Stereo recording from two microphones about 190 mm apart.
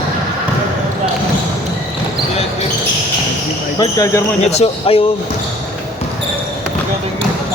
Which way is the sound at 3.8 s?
20° left (ahead or behind).